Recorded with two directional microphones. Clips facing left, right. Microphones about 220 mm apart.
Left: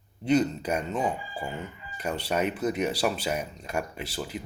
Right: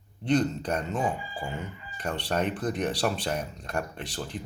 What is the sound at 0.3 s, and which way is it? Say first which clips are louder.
Speech: left 1 dB; 10° left (ahead or behind).